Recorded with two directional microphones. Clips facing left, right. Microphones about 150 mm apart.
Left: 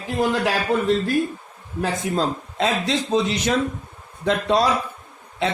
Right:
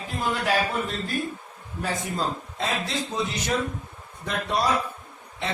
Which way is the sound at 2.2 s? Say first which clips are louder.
Left 6 dB; 90° left.